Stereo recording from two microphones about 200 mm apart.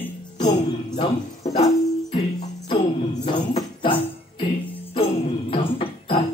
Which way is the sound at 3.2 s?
25° left (ahead or behind).